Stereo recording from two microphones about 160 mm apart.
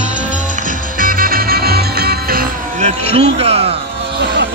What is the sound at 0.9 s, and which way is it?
Music, 60° right (ahead or behind).